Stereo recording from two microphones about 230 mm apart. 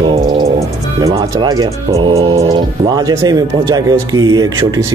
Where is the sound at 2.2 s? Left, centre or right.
Right.